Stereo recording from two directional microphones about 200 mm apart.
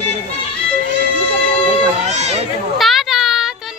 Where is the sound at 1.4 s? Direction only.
25° left (ahead or behind).